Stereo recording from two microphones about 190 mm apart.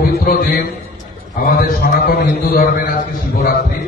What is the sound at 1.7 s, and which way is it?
Speech, 50° left (ahead or behind).